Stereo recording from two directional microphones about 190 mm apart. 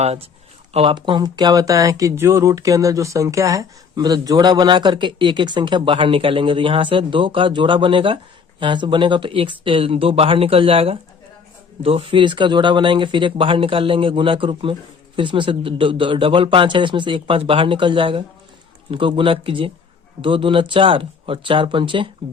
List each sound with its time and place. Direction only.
0.0 s speech: 30° right (ahead or behind)